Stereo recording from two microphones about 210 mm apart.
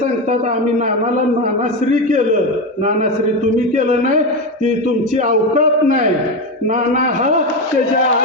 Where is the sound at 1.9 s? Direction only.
35° right (ahead or behind).